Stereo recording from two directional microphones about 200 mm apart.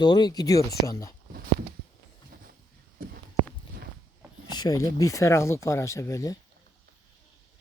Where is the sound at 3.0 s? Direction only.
45° right (ahead or behind).